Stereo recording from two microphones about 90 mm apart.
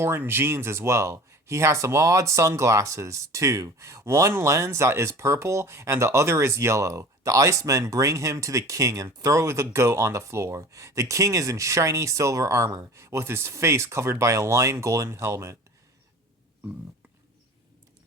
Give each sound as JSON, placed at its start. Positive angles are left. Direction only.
{"t": 0.0, "sound": "speech", "side_deg": -25}